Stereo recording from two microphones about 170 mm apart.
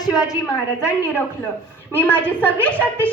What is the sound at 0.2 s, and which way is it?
A woman's voice, 20° left (ahead or behind).